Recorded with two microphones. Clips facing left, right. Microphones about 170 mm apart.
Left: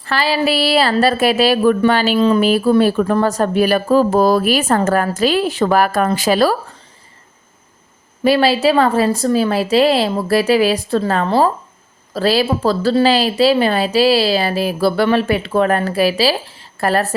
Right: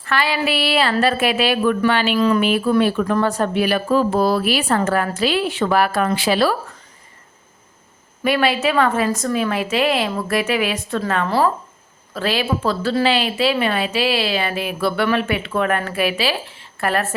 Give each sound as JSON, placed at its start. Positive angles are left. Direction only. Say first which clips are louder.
{"t": 0.0, "sound": "a woman's voice", "louder": "left 4 dB", "side_deg": 35}
{"t": 2.1, "sound": "a woman's voice", "louder": "left 3 dB", "side_deg": 25}
{"t": 8.2, "sound": "a woman's voice", "louder": "left 5 dB", "side_deg": 30}